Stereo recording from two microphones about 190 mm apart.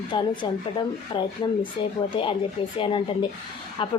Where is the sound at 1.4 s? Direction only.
25° left (ahead or behind).